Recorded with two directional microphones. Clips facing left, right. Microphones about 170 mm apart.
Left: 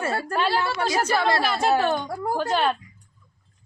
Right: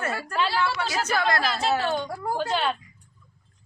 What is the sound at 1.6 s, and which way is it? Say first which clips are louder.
A woman's voice: left 3 dB; 50° left (ahead or behind).